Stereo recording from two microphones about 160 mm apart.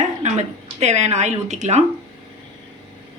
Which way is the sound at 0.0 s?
45° right (ahead or behind).